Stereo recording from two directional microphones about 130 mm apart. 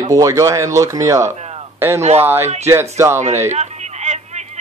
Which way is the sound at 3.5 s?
60° right (ahead or behind).